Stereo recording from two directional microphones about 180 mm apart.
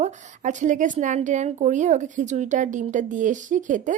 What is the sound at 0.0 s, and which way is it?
A woman's voice, 45° right (ahead or behind).